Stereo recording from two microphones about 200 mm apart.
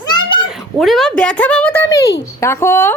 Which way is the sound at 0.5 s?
Centre (ahead or behind).